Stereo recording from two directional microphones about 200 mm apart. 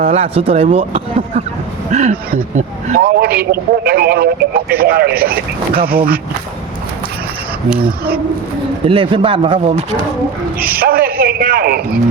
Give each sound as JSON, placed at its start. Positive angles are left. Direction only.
{"t": 0.0, "sound": "a man's voice", "side_deg": -30}
{"t": 8.9, "sound": "speech", "side_deg": -25}
{"t": 10.8, "sound": "a man's voice", "side_deg": -50}